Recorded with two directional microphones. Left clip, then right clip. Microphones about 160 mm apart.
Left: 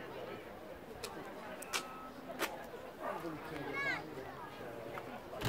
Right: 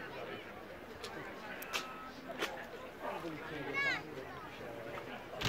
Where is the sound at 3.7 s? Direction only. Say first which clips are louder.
Right 3 dB; 45° left (ahead or behind).